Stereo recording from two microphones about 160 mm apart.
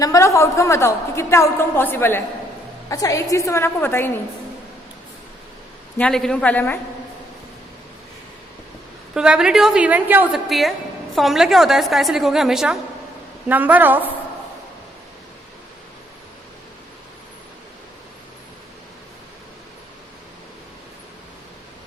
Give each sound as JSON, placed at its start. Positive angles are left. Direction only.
{"t": 0.0, "sound": "a woman's voice", "side_deg": 20}
{"t": 6.0, "sound": "a woman's voice", "side_deg": 5}
{"t": 9.1, "sound": "a woman's voice", "side_deg": -5}